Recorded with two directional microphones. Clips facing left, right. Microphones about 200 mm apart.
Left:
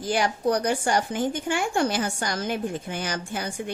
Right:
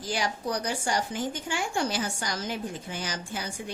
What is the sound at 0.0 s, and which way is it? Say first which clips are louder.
Speech: left 7 dB; 55° left (ahead or behind).